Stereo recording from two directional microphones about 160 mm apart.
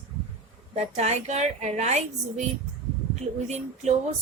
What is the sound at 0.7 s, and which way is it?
A woman's voice, 45° right (ahead or behind).